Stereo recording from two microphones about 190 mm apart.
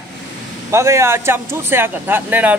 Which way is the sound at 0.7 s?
15° right (ahead or behind).